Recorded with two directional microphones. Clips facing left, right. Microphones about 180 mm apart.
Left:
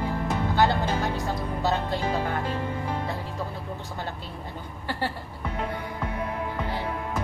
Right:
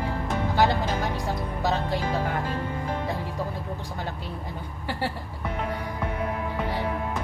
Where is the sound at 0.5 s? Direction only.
10° right (ahead or behind).